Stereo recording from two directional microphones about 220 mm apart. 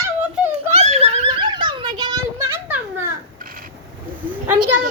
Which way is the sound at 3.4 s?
40° right (ahead or behind).